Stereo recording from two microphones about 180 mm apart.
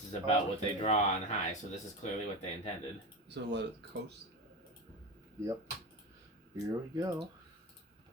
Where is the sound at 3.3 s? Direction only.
75° right (ahead or behind).